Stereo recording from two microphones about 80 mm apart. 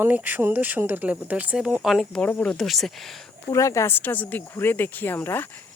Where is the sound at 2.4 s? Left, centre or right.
Centre.